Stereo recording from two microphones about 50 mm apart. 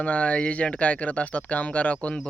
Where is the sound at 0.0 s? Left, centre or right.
Left.